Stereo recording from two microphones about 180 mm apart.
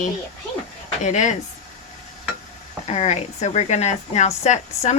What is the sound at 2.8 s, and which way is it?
A woman's voice, 35° left (ahead or behind).